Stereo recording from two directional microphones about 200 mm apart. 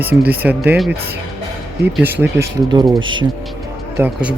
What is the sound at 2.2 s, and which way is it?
Speech, 20° right (ahead or behind).